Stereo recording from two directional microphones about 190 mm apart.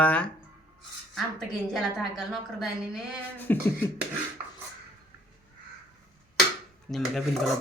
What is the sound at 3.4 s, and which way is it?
Beatboxing, 10° left (ahead or behind).